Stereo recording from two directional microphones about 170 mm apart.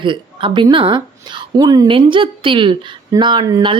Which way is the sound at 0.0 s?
30° right (ahead or behind).